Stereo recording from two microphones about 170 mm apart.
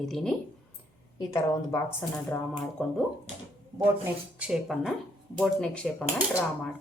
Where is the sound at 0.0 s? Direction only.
Centre (ahead or behind).